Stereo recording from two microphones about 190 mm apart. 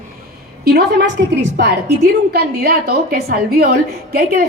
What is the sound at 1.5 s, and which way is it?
A woman's voice, 60° right (ahead or behind).